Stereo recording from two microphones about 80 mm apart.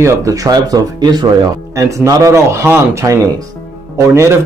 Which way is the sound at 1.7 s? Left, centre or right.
Right.